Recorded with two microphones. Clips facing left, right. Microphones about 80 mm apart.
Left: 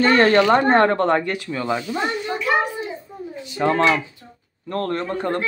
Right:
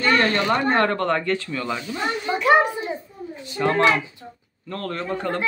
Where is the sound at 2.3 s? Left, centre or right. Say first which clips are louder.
Right 5 dB; right.